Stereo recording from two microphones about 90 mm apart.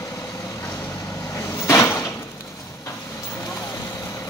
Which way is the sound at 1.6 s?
30° left (ahead or behind).